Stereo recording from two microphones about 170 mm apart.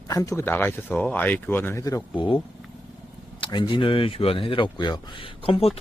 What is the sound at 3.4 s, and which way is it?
Speech, 25° left (ahead or behind).